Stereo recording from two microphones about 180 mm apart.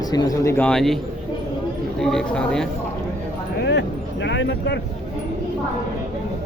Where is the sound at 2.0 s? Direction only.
5° left (ahead or behind).